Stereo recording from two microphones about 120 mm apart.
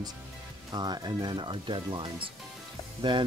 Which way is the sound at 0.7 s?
35° right (ahead or behind).